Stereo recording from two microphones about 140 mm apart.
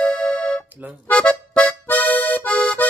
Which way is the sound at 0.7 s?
15° right (ahead or behind).